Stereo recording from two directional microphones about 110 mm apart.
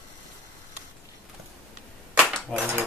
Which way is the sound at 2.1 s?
10° right (ahead or behind).